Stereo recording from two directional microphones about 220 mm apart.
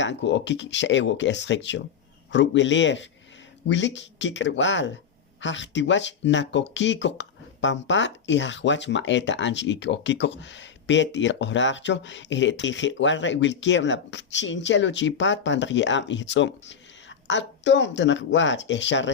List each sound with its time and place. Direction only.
0.0 s speech: 55° left (ahead or behind)